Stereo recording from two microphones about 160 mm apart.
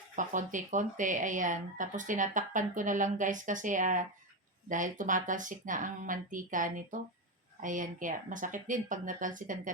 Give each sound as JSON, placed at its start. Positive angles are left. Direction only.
{"t": 0.2, "sound": "speech", "side_deg": -55}